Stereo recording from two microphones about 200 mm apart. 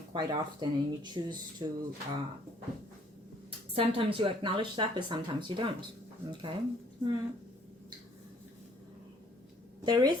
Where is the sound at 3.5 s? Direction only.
25° right (ahead or behind).